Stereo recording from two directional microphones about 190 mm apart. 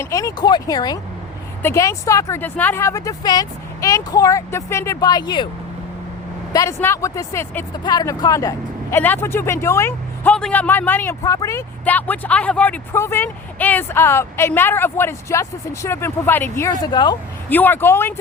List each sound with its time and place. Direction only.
0.0 s speech: 15° left (ahead or behind)
6.5 s speech: 15° left (ahead or behind)
16.8 s speech: 25° left (ahead or behind)
17.5 s speech: 10° left (ahead or behind)